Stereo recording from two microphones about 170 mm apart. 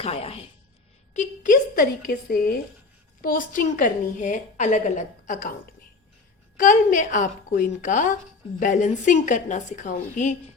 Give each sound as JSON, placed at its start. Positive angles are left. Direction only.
{"t": 0.0, "sound": "a woman's voice", "side_deg": 35}
{"t": 1.1, "sound": "a woman's voice", "side_deg": 50}
{"t": 6.6, "sound": "a woman's voice", "side_deg": 50}